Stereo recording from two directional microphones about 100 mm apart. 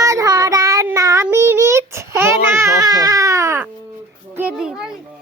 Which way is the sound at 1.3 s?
25° right (ahead or behind).